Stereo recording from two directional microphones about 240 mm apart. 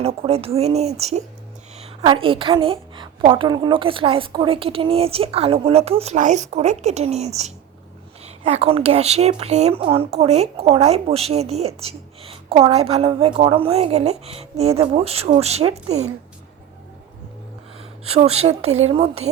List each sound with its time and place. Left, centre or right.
0.0 s a woman's voice: right
18.1 s a woman's voice: right